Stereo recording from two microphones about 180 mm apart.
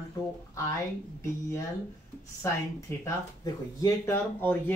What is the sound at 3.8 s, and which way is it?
Speech, 10° left (ahead or behind).